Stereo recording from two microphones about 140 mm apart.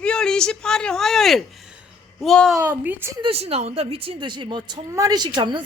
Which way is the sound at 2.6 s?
15° right (ahead or behind).